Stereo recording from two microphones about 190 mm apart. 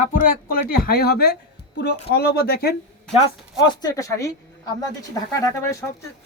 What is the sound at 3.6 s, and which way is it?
Speech, 20° left (ahead or behind).